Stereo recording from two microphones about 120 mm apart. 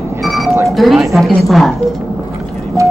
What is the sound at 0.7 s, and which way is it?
Speech, centre (ahead or behind).